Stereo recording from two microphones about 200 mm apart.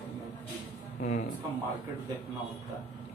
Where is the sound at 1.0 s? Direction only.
40° left (ahead or behind).